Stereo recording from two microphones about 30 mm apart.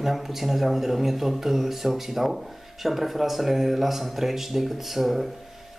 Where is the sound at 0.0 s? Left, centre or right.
Centre.